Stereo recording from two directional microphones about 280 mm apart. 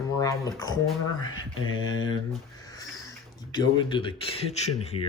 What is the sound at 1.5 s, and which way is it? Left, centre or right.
Mantra, left.